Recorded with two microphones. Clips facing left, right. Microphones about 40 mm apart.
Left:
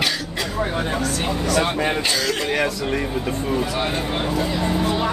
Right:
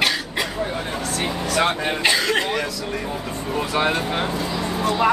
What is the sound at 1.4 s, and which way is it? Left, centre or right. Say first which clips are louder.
Speech: left 1 dB; right.